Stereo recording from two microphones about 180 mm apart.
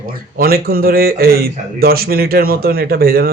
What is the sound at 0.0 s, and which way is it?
Speech, 55° right (ahead or behind).